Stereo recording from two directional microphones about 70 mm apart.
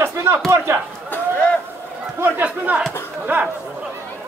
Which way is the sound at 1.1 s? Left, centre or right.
Left.